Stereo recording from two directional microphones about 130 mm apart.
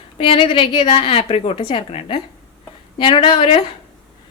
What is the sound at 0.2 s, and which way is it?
A woman's voice, 40° left (ahead or behind).